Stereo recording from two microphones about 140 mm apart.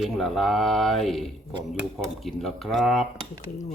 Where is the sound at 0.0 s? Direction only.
Centre (ahead or behind).